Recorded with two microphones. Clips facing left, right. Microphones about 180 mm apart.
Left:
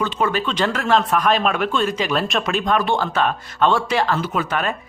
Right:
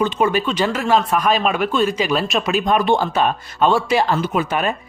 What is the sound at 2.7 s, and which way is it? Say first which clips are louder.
A woman's voice: right 3 dB; 15° right (ahead or behind).